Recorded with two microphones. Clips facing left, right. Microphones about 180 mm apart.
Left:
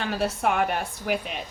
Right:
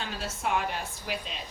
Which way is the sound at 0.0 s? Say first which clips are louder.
Left 8 dB; 65° left (ahead or behind).